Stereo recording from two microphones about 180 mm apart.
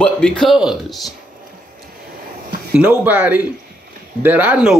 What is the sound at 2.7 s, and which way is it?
Speech, 10° right (ahead or behind).